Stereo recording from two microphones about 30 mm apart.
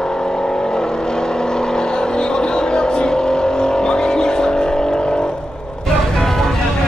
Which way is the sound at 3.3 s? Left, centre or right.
Left.